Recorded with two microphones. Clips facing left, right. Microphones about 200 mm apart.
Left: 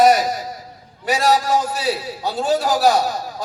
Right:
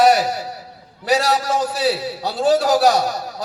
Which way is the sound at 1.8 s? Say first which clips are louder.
Right 2 dB; 35° right (ahead or behind).